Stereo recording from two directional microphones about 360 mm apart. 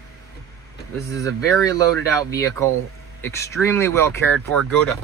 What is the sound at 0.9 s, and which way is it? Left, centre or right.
Speech, centre.